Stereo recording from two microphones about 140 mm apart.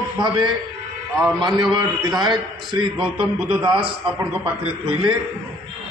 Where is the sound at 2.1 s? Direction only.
Centre (ahead or behind).